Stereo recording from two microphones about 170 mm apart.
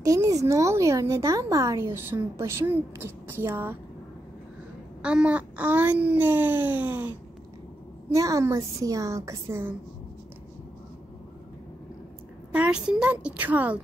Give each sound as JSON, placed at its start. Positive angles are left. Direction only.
{"t": 0.0, "sound": "speech", "side_deg": -20}
{"t": 5.0, "sound": "a woman's voice", "side_deg": -5}
{"t": 12.5, "sound": "speech", "side_deg": -5}